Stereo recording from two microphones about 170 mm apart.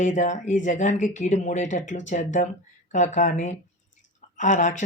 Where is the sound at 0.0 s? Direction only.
45° left (ahead or behind).